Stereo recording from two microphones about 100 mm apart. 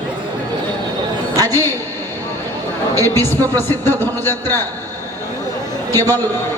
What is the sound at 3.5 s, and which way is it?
Speech, 20° left (ahead or behind).